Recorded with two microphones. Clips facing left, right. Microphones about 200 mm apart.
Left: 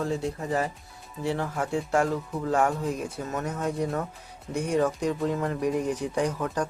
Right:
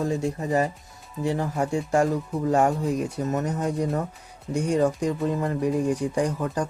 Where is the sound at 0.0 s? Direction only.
20° right (ahead or behind).